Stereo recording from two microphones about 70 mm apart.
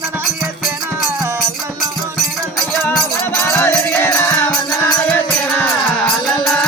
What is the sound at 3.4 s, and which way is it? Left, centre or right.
Music, left.